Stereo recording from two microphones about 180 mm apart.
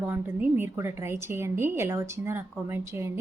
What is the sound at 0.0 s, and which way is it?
Speech, 10° right (ahead or behind).